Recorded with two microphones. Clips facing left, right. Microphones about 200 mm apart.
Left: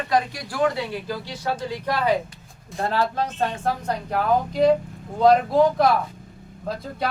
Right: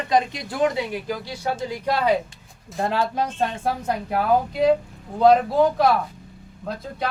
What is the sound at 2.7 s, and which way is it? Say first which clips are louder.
A woman's voice: even; 15° right (ahead or behind).